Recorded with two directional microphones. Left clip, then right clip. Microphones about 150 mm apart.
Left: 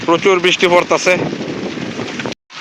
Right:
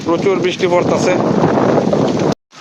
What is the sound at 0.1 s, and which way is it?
Speech, 20° right (ahead or behind).